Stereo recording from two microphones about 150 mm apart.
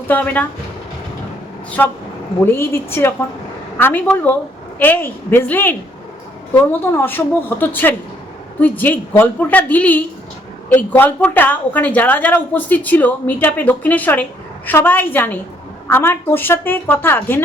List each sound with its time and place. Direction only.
0.1 s a woman's voice: 10° left (ahead or behind)
1.8 s a woman's voice: 10° left (ahead or behind)